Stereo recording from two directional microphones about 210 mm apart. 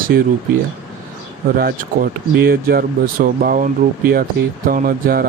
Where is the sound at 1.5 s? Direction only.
45° right (ahead or behind).